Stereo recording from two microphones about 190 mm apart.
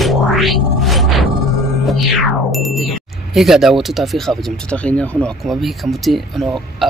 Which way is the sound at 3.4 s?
Centre (ahead or behind).